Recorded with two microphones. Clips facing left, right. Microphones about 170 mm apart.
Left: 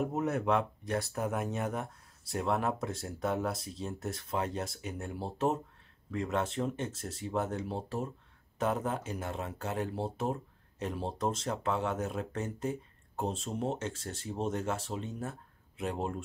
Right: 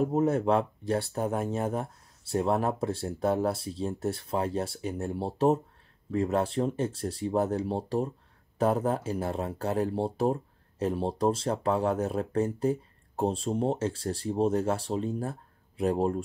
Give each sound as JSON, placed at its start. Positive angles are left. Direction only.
{"t": 0.0, "sound": "speech", "side_deg": -30}